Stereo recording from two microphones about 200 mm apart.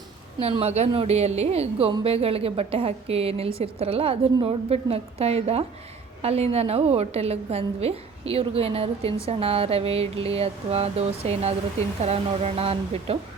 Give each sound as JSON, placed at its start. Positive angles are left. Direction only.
{"t": 0.3, "sound": "a woman's voice", "side_deg": -30}